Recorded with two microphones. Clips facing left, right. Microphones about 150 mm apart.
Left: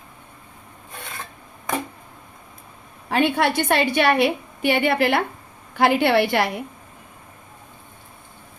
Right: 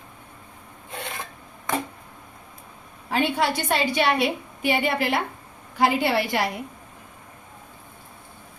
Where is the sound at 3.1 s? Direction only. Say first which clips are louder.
Left 3 dB; 65° left (ahead or behind).